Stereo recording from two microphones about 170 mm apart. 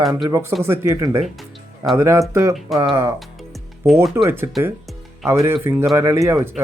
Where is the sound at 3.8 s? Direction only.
15° right (ahead or behind).